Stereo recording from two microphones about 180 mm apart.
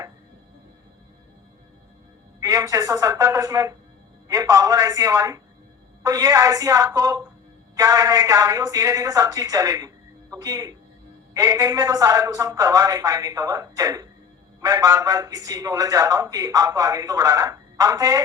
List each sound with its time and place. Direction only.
2.4 s a man's voice: 20° right (ahead or behind)